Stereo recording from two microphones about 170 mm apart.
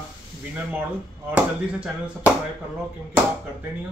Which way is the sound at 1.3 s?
10° right (ahead or behind).